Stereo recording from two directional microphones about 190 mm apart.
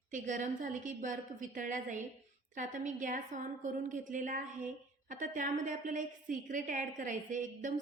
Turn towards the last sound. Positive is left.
turn(degrees=-40)  # may be behind; listen again after turning